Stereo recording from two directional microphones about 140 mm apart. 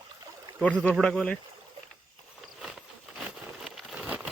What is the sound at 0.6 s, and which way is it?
Speech, 10° left (ahead or behind).